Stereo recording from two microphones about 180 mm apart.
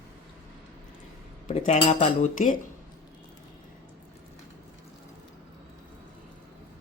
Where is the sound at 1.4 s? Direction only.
40° left (ahead or behind).